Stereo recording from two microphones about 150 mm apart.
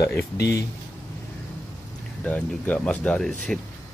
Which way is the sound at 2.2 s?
10° left (ahead or behind).